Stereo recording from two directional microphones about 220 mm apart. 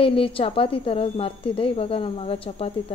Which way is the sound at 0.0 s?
25° left (ahead or behind).